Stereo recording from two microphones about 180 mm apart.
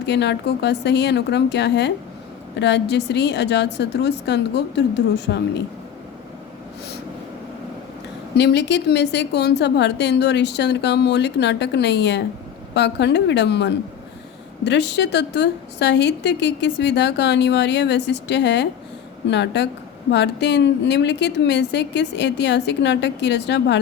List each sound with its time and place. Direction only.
0.0 s a woman's voice: 70° left (ahead or behind)
8.4 s a woman's voice: 70° left (ahead or behind)